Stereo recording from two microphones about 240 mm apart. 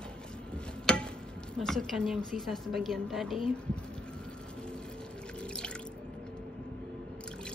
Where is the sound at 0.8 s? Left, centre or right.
Centre.